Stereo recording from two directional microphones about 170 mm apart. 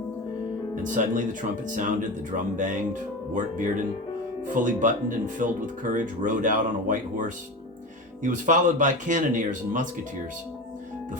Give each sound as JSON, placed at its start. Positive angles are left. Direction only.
{"t": 0.8, "sound": "speech", "side_deg": -50}